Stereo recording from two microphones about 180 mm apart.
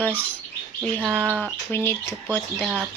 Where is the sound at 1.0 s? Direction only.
5° right (ahead or behind).